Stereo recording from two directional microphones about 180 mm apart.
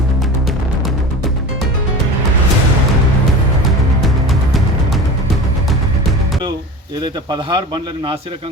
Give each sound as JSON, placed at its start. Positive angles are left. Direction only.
{"t": 4.0, "sound": "music", "side_deg": 0}
{"t": 7.0, "sound": "speech", "side_deg": -25}